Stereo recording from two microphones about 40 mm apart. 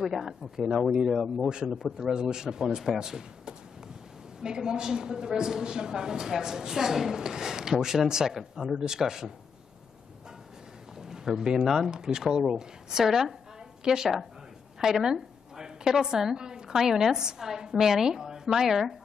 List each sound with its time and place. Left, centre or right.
0.0 s a woman's voice: centre
2.0 s a woman's voice: centre
11.0 s a sound: centre
11.6 s speech: centre
11.9 s a woman's voice: centre